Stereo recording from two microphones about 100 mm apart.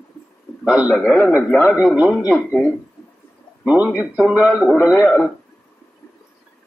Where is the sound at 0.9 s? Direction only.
10° left (ahead or behind).